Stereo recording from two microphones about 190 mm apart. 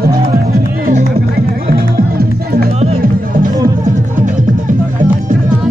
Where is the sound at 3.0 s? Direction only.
45° right (ahead or behind).